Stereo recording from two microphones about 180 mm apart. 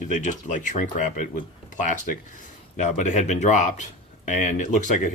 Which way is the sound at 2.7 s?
40° left (ahead or behind).